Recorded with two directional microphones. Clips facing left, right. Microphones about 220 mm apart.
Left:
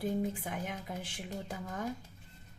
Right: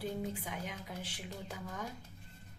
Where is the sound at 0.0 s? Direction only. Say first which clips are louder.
Left 5 dB; 45° left (ahead or behind).